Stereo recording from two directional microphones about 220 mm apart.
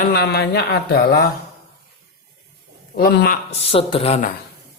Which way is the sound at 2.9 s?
45° left (ahead or behind).